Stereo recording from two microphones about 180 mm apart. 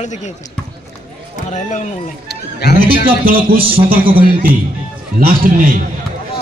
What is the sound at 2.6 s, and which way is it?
Speech, 65° left (ahead or behind).